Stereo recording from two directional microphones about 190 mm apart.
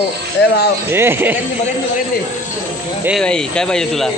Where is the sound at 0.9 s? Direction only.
10° right (ahead or behind).